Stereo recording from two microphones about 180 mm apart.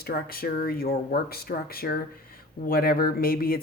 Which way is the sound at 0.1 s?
55° left (ahead or behind).